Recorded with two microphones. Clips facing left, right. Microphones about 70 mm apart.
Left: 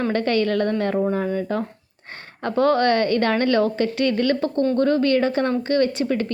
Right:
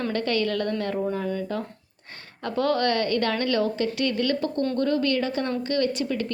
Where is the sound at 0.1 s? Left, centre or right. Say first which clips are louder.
Left 4 dB; left.